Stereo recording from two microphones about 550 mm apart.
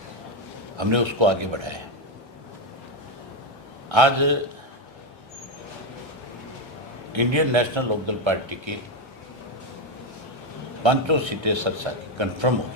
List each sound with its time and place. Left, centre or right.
0.8 s speech: right
3.8 s speech: right
7.1 s speech: right
10.8 s speech: right